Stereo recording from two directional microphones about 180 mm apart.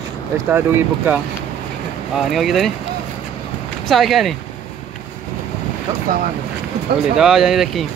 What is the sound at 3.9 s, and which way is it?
Speech, centre (ahead or behind).